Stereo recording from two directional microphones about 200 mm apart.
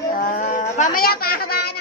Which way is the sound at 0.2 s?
40° left (ahead or behind).